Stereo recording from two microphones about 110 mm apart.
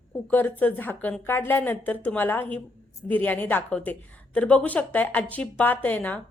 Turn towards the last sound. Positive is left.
turn(degrees=15)  # may be behind; listen again after turning